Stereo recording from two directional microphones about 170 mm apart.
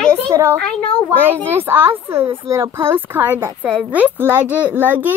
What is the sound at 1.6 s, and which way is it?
A woman's voice, 15° right (ahead or behind).